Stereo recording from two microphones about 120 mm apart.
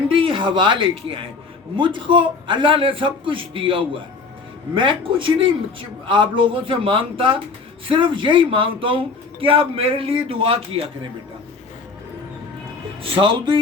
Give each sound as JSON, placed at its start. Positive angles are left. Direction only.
{"t": 0.1, "sound": "speech", "side_deg": -45}
{"t": 13.0, "sound": "speech", "side_deg": -50}